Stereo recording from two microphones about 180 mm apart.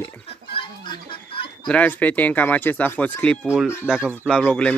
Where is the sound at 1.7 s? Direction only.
10° left (ahead or behind).